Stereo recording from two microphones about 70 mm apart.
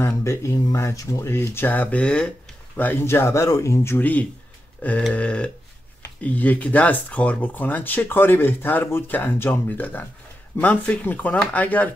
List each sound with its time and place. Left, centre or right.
0.0 s speech: left
1.3 s speech: left; by 2.3 s centre
2.8 s speech: left
3.9 s speech: left
4.8 s a sound: left
6.2 s speech: left